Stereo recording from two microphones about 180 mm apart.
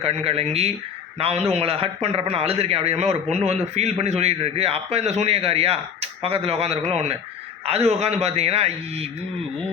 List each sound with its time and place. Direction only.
0.0 s a man's voice: 35° right (ahead or behind)